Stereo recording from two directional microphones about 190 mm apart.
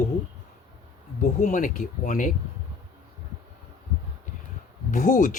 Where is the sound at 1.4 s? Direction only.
40° left (ahead or behind).